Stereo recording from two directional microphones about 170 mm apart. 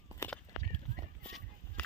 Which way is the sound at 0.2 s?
15° left (ahead or behind).